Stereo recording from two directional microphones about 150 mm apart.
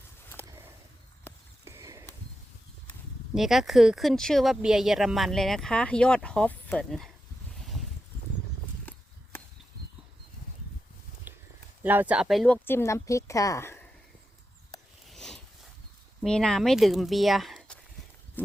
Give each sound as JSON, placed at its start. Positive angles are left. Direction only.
{"t": 1.3, "sound": "a sound", "side_deg": 15}
{"t": 1.6, "sound": "horse", "side_deg": -20}
{"t": 3.3, "sound": "speech", "side_deg": 0}
{"t": 11.3, "sound": "a sound", "side_deg": -15}
{"t": 11.8, "sound": "speech", "side_deg": -10}
{"t": 12.6, "sound": "a woman's voice", "side_deg": 15}
{"t": 15.1, "sound": "a sound", "side_deg": 5}
{"t": 16.2, "sound": "speech", "side_deg": 5}
{"t": 18.4, "sound": "livestock", "side_deg": 10}